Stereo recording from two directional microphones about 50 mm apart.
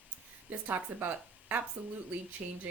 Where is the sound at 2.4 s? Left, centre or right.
Centre.